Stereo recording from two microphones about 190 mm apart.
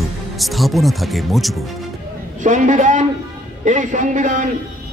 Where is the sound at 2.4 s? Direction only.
40° right (ahead or behind).